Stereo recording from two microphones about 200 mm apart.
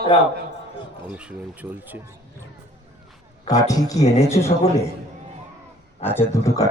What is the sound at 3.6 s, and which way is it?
Speech, 15° left (ahead or behind).